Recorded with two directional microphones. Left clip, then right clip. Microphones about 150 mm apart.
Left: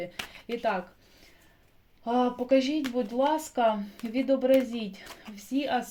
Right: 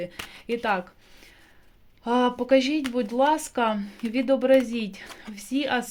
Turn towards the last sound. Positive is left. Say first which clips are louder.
# right 3 dB
turn(degrees=-35)  # may be behind; listen again after turning